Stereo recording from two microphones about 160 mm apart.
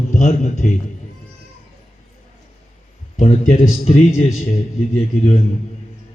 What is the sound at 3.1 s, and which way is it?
Speech, 40° left (ahead or behind).